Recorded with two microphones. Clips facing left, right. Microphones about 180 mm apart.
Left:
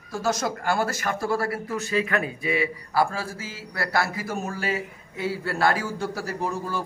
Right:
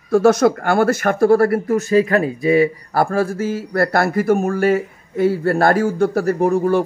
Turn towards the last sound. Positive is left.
turn(degrees=-60)  # may be behind; listen again after turning